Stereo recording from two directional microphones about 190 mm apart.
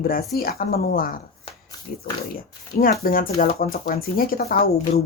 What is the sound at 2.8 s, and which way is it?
Speech, 45° left (ahead or behind).